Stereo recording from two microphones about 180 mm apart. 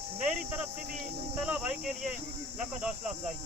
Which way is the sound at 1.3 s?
5° right (ahead or behind).